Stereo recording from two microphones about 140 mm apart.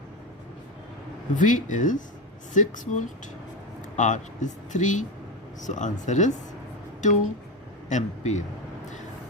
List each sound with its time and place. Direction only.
1.4 s speech: 65° left (ahead or behind)